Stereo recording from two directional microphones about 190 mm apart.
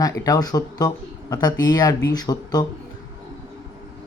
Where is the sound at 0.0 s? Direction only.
20° left (ahead or behind).